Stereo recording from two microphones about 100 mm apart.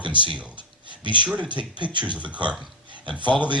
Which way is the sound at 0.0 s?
55° right (ahead or behind).